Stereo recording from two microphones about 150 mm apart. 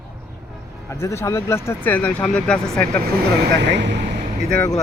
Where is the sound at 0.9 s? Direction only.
20° left (ahead or behind).